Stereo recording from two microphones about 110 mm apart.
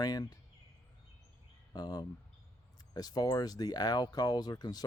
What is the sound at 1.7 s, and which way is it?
A man's voice, 40° left (ahead or behind).